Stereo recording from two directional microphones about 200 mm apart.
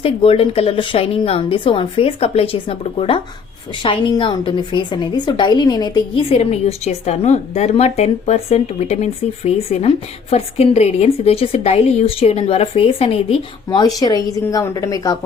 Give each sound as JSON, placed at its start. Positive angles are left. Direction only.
{"t": 0.0, "sound": "a woman's voice", "side_deg": 30}
{"t": 13.7, "sound": "speech", "side_deg": 20}